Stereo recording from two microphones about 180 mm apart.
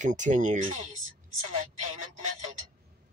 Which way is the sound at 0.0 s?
45° right (ahead or behind).